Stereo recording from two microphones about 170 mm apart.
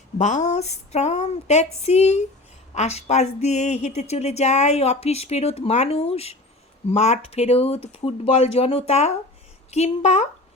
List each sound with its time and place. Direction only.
0.2 s speech: 45° left (ahead or behind)